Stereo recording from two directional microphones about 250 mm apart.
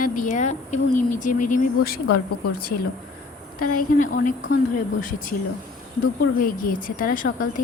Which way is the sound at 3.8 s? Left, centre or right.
Left.